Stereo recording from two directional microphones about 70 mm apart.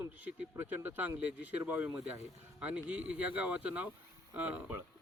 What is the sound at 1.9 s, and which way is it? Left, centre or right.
Speech, right.